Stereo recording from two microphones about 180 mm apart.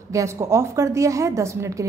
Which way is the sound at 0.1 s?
15° right (ahead or behind).